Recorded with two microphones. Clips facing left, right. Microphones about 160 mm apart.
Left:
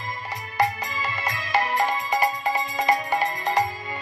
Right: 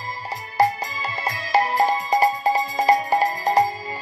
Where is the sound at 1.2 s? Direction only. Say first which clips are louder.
Right 5 dB; 35° right (ahead or behind).